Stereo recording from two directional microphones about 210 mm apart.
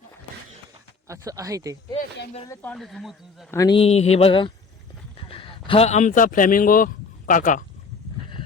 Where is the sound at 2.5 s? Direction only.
5° left (ahead or behind).